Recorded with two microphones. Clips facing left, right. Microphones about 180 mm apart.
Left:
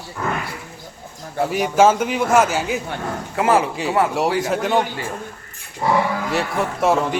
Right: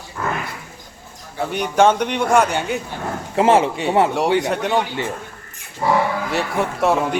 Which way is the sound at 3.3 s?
25° right (ahead or behind).